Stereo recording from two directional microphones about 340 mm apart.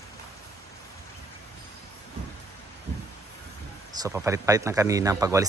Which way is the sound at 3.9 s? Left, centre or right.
Centre.